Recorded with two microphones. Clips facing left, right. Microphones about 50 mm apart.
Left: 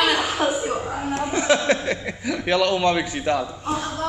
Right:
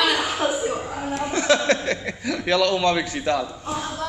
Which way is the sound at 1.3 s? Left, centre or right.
Centre.